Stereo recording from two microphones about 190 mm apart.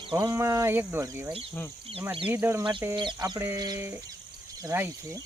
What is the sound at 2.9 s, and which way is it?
Chicken, 25° right (ahead or behind).